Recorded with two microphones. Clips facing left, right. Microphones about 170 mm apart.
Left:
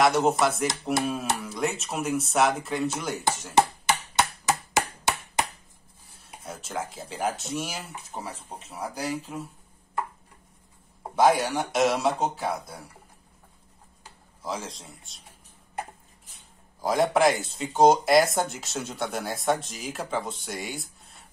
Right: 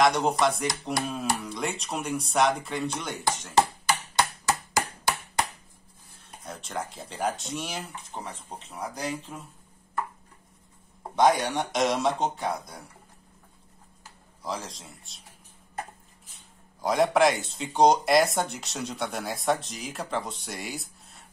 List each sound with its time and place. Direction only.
0.0 s speech: 5° left (ahead or behind)
3.5 s chop: 20° left (ahead or behind)
6.4 s speech: 5° left (ahead or behind)
11.1 s speech: 5° left (ahead or behind)
14.4 s speech: centre (ahead or behind)
16.8 s speech: centre (ahead or behind)